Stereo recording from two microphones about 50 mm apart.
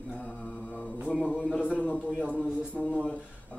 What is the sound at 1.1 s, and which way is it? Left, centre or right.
Speech, centre.